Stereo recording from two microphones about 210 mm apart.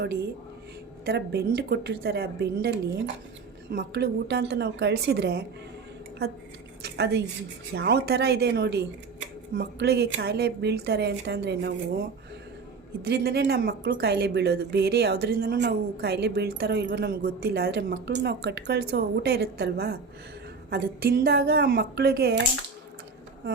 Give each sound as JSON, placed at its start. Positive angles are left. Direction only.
{"t": 1.0, "sound": "a woman's voice", "side_deg": -50}
{"t": 6.8, "sound": "a woman's voice", "side_deg": -55}
{"t": 13.1, "sound": "a woman's voice", "side_deg": -50}